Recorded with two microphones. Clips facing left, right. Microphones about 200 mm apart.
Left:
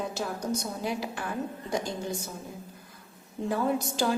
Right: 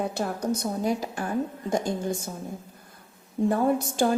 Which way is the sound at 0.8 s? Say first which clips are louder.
Right 5 dB; 45° right (ahead or behind).